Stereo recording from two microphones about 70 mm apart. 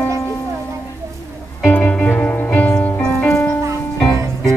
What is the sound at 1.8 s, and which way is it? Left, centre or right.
Music, centre.